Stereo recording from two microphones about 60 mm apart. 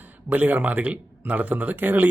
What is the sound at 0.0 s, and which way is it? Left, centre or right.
Speech, right.